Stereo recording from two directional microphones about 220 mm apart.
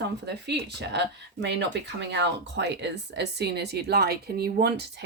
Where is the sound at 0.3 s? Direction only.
50° right (ahead or behind).